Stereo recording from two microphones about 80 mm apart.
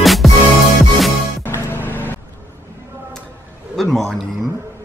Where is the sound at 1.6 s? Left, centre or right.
Left.